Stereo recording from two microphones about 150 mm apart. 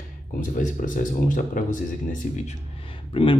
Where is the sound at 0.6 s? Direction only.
60° left (ahead or behind).